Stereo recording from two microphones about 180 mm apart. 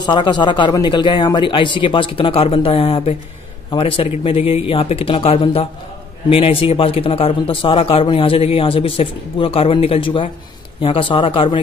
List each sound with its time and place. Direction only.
0.0 s a man's voice: 25° left (ahead or behind)